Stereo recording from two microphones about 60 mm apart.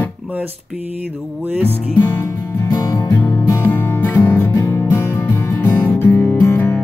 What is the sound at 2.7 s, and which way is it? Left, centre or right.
Music, left.